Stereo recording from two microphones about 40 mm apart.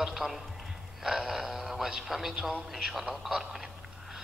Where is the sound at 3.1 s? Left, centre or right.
Centre.